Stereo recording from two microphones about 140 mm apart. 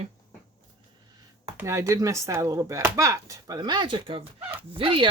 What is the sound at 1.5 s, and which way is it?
Chopping, 20° right (ahead or behind).